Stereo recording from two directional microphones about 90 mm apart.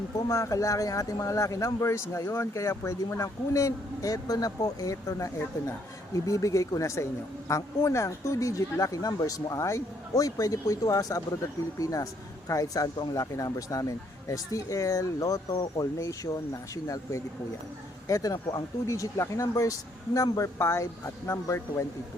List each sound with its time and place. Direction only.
0.2 s speech: 35° left (ahead or behind)
20.6 s speech: 30° left (ahead or behind)